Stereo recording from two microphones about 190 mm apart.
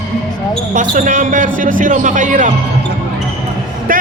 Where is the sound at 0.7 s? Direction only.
40° right (ahead or behind).